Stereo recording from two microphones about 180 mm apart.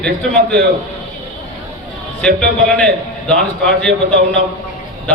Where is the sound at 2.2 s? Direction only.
5° left (ahead or behind).